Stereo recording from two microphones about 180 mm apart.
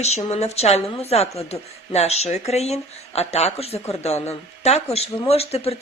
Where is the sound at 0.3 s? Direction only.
35° left (ahead or behind).